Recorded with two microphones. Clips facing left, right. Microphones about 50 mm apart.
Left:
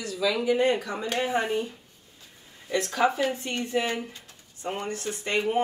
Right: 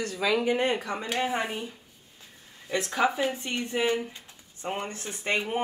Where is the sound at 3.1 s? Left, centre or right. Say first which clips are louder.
Left 1 dB; centre.